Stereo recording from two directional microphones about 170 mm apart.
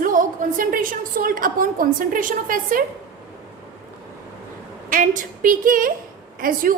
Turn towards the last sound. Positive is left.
turn(degrees=-55)  # may be behind; listen again after turning